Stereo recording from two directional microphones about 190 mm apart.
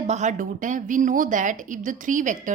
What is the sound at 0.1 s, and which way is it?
A woman's voice, 40° right (ahead or behind).